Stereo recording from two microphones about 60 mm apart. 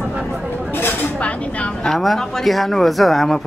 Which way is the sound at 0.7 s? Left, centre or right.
Left.